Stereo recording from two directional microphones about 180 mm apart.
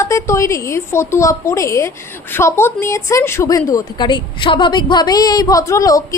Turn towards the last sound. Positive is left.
turn(degrees=20)  # may be behind; listen again after turning